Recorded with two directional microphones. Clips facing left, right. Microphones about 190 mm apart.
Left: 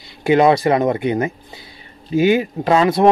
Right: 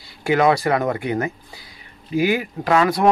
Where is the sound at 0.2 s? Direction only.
25° left (ahead or behind).